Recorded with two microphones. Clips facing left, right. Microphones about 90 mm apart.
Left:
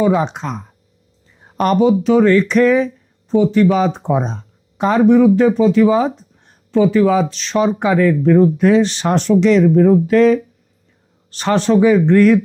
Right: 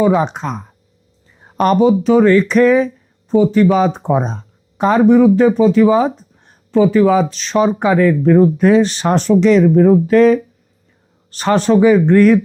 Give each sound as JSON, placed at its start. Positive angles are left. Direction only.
{"t": 0.0, "sound": "speech", "side_deg": -40}